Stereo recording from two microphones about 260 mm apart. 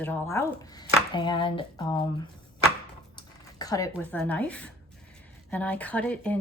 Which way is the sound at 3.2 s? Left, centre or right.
Centre.